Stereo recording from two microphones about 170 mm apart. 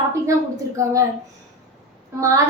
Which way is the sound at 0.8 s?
15° right (ahead or behind).